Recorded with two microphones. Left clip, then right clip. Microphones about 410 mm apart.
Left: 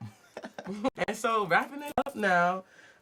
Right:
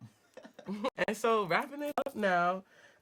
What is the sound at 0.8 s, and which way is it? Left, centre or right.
Speech, right.